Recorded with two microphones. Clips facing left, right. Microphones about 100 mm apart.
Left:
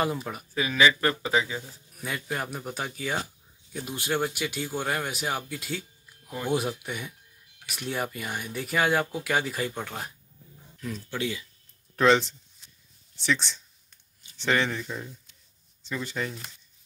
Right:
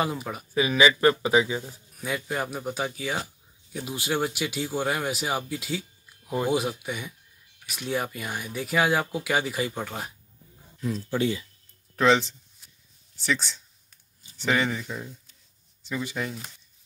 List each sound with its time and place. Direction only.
0.0 s speech: centre (ahead or behind)
0.6 s speech: 15° right (ahead or behind)
2.0 s speech: centre (ahead or behind)
11.1 s speech: 35° right (ahead or behind)
11.9 s a sound: centre (ahead or behind)
14.3 s speech: 5° right (ahead or behind)